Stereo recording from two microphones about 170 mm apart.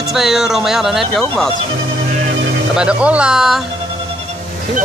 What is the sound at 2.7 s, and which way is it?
Speech, 5° right (ahead or behind).